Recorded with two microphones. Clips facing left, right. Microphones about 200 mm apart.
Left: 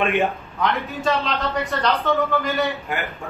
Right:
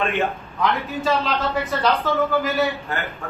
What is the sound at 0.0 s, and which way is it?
Speech, 15° left (ahead or behind).